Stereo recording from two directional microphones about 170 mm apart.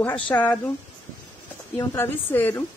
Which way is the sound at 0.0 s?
10° left (ahead or behind).